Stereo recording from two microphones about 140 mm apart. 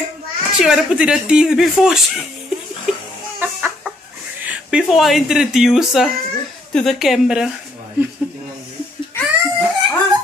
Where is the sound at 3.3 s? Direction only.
15° right (ahead or behind).